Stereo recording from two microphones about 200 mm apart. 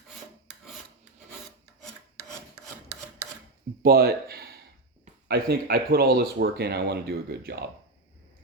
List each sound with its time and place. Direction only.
3.8 s speech: 50° right (ahead or behind)